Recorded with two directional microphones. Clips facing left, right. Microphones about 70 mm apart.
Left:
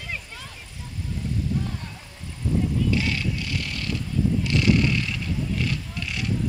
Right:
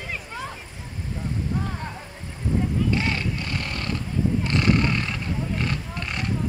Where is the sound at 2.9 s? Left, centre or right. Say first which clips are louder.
Even; right.